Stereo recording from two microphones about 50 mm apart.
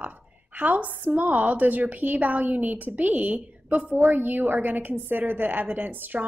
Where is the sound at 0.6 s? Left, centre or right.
Right.